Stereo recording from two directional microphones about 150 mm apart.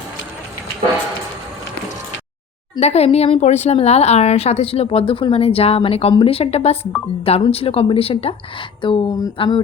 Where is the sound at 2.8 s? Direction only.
45° left (ahead or behind).